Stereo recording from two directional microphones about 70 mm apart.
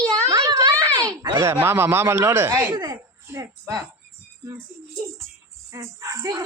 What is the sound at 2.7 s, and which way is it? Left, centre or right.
Speech, right.